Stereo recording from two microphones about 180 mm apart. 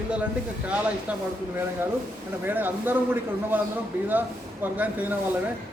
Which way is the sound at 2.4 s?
10° right (ahead or behind).